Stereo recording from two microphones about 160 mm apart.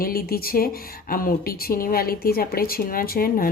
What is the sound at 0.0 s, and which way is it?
A woman's voice, 70° left (ahead or behind).